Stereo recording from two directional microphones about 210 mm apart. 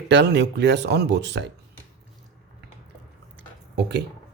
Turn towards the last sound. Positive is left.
turn(degrees=-55)  # may be behind; listen again after turning